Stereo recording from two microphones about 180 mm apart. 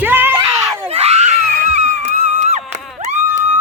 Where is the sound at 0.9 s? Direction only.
35° right (ahead or behind).